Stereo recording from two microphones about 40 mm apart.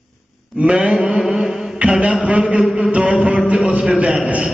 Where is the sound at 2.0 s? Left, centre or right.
Right.